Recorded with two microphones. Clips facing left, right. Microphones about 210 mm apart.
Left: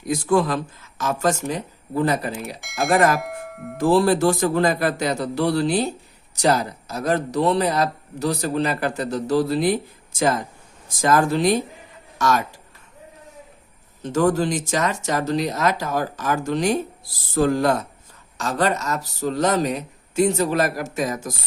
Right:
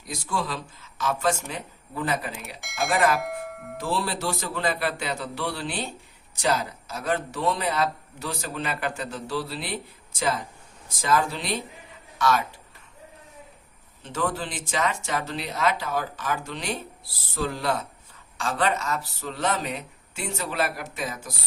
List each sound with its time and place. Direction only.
0.0 s speech: 50° left (ahead or behind)
2.6 s speech: centre (ahead or behind)
3.2 s doorbell: centre (ahead or behind)
3.8 s a man's voice: 45° left (ahead or behind)
14.0 s a man's voice: 45° left (ahead or behind)